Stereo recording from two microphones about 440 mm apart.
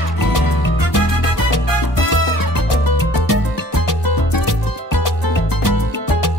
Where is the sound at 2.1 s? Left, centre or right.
Left.